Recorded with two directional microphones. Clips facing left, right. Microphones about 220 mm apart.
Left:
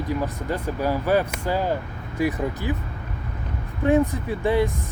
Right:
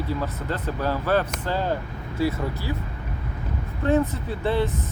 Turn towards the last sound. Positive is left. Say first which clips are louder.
# left 3 dB
turn(degrees=15)  # may be behind; listen again after turning